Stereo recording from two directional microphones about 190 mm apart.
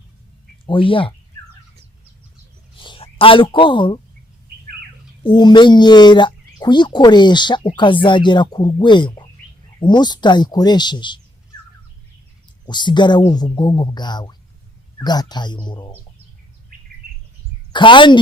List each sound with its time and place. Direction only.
0.6 s speech: 25° left (ahead or behind)
2.7 s speech: 25° left (ahead or behind)
5.2 s speech: 25° left (ahead or behind)
12.6 s speech: 25° left (ahead or behind)
16.7 s bird: 50° right (ahead or behind)
17.7 s a woman's voice: 25° left (ahead or behind)